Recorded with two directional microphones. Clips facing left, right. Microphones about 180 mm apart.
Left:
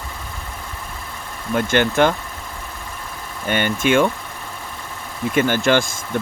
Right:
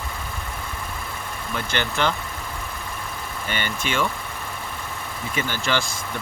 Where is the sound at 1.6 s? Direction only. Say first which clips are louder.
Left 9 dB; 50° left (ahead or behind).